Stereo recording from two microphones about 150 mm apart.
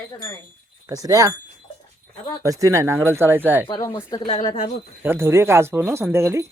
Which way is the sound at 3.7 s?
20° left (ahead or behind).